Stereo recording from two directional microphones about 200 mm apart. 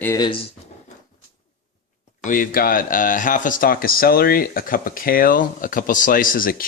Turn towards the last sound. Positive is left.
turn(degrees=45)  # may be behind; listen again after turning